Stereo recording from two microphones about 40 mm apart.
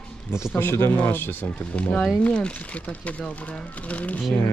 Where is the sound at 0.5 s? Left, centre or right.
Left.